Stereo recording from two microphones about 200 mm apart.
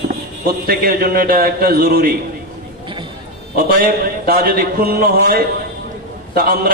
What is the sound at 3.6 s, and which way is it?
A man's voice, 45° right (ahead or behind).